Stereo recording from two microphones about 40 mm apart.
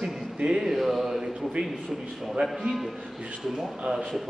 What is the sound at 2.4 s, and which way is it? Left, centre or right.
Speech, right.